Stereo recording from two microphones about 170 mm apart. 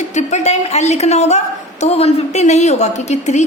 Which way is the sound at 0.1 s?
45° left (ahead or behind).